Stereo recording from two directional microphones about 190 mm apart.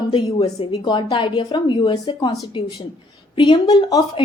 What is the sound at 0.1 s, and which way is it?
A woman's voice, 25° left (ahead or behind).